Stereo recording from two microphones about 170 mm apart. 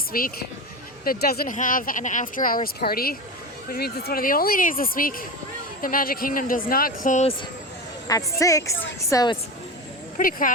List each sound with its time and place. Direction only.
0.1 s speech: 60° left (ahead or behind)
8.4 s a woman's voice: 20° left (ahead or behind)
10.2 s speech: 55° left (ahead or behind)